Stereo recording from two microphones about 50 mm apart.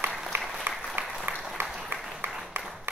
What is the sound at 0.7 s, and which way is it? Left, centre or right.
Applause, right.